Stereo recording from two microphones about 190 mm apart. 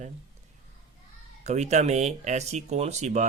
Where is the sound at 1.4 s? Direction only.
35° right (ahead or behind).